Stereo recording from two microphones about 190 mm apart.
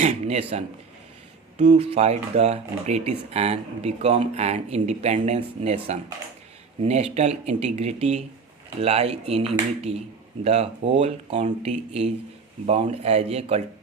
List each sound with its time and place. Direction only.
0.0 s a man's voice: 35° right (ahead or behind)